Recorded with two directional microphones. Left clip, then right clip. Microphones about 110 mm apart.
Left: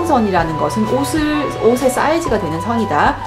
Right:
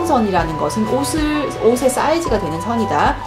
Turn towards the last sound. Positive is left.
turn(degrees=5)  # may be behind; listen again after turning